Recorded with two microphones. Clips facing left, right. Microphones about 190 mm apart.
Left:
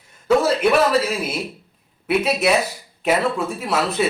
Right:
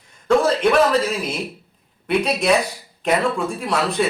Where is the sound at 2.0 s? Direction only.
5° left (ahead or behind).